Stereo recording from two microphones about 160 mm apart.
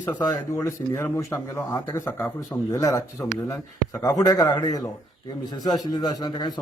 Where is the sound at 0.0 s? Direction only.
15° left (ahead or behind).